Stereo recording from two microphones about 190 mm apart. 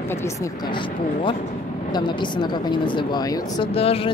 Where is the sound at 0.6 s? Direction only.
25° left (ahead or behind).